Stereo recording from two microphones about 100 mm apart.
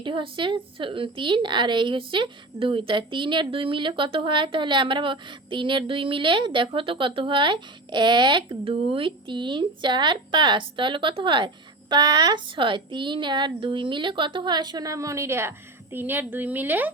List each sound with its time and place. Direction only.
0.0 s a woman's voice: 55° right (ahead or behind)
8.6 s a woman's voice: 60° right (ahead or behind); by 16.9 s 20° right (ahead or behind)